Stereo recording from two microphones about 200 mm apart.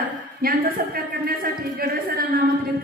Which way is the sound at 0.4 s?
50° right (ahead or behind).